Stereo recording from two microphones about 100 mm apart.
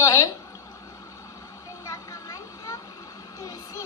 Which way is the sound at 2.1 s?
35° left (ahead or behind).